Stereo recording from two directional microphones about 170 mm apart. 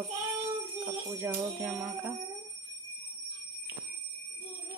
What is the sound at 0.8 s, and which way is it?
Speech, 15° right (ahead or behind).